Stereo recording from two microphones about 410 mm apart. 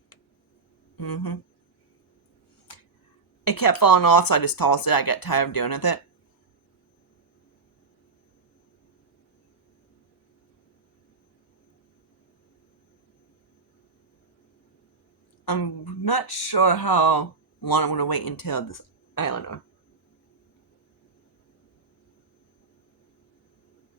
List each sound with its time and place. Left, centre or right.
0.9 s speech: left
3.4 s speech: left
15.4 s speech: left